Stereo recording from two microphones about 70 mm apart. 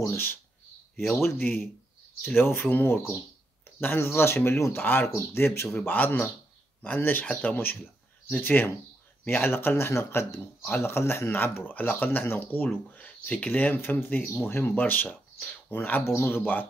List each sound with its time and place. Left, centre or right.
0.0 s speech: left
5.8 s speech: left